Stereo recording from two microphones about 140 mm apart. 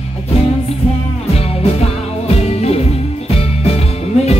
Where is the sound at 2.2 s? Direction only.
50° left (ahead or behind).